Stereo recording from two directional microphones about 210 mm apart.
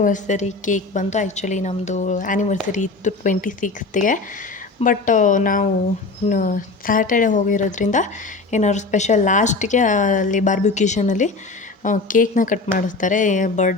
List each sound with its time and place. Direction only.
0.0 s speech: 35° left (ahead or behind)